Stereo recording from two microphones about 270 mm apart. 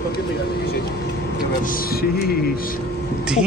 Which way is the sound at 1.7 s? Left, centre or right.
Left.